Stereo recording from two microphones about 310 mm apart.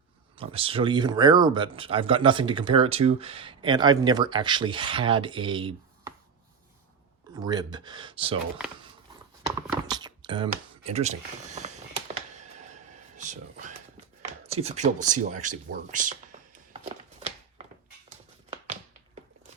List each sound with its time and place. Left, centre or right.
0.3 s speech: centre
7.3 s speech: centre
9.6 s computer keyboard: centre
14.4 s a sound: centre